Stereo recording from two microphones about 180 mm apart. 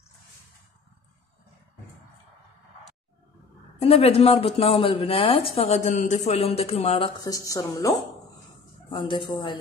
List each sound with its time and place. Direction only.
3.8 s speech: 35° left (ahead or behind)
7.2 s speech: 20° left (ahead or behind)
8.9 s speech: 25° left (ahead or behind)